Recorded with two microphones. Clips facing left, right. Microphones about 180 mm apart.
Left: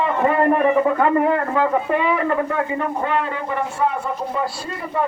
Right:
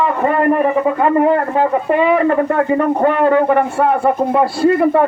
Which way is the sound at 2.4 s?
55° right (ahead or behind).